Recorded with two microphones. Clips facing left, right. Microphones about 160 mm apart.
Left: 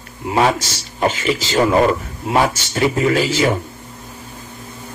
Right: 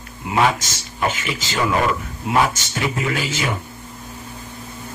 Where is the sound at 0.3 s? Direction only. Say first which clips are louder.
Left 2 dB; 35° left (ahead or behind).